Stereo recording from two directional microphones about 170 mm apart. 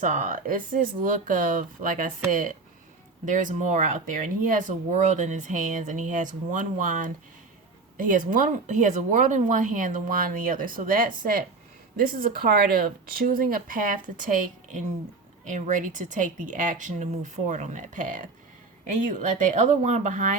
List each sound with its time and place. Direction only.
0.0 s speech: 45° right (ahead or behind)